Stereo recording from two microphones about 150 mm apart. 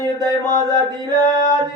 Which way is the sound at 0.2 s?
25° right (ahead or behind).